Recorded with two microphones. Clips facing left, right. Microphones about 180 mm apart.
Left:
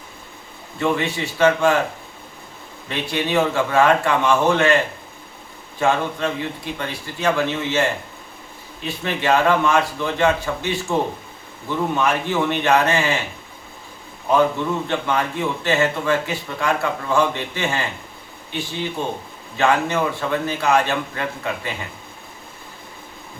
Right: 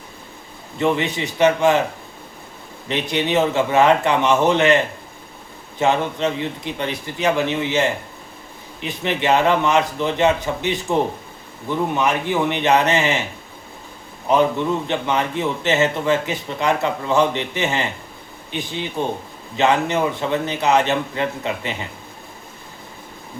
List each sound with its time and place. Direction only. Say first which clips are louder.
0.8 s a man's voice: right 2 dB; 20° right (ahead or behind)
2.9 s a man's voice: right 2 dB; 20° right (ahead or behind)
5.8 s a man's voice: right 1 dB; 20° right (ahead or behind)
14.3 s a man's voice: right 1 dB; 20° right (ahead or behind)